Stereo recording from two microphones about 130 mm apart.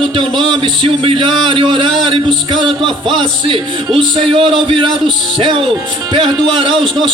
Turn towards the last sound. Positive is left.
turn(degrees=-40)  # may be behind; listen again after turning